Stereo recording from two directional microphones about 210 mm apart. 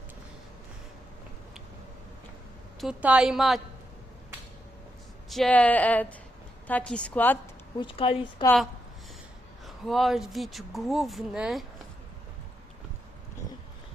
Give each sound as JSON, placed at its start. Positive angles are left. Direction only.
{"t": 2.8, "sound": "speech", "side_deg": -5}
{"t": 5.3, "sound": "speech", "side_deg": 5}
{"t": 7.8, "sound": "speech", "side_deg": 25}
{"t": 9.6, "sound": "speech", "side_deg": 0}